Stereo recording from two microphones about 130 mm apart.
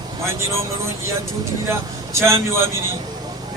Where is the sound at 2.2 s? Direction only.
20° right (ahead or behind).